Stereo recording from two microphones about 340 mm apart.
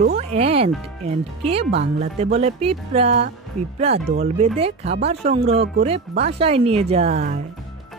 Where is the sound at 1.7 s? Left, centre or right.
Right.